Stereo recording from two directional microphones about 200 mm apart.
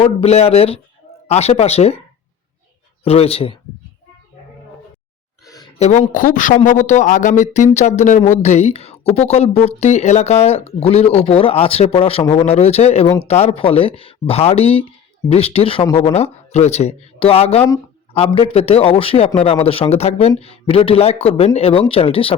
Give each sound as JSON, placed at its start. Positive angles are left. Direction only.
{"t": 0.0, "sound": "speech", "side_deg": 30}
{"t": 3.0, "sound": "speech", "side_deg": 30}
{"t": 5.8, "sound": "a man's voice", "side_deg": 40}